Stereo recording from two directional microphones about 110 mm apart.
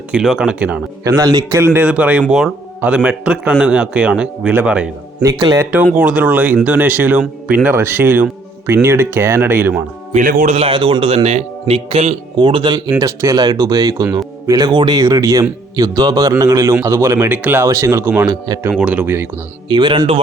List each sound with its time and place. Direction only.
0.1 s a man's voice: 5° right (ahead or behind)
1.0 s speech: 30° right (ahead or behind)
1.5 s a man's voice: 20° right (ahead or behind)
5.2 s speech: 35° right (ahead or behind)
5.7 s a man's voice: 10° right (ahead or behind)
10.1 s speech: 80° right
10.7 s speech: 50° right (ahead or behind); by 12.1 s 65° right (ahead or behind)
12.4 s speech: 45° right (ahead or behind)
13.0 s speech: 35° right (ahead or behind)
18.7 s a man's voice: 10° right (ahead or behind)
19.6 s speech: 45° right (ahead or behind)